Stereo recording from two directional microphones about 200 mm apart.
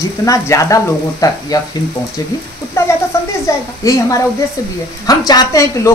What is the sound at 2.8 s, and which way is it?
Frying, 15° left (ahead or behind).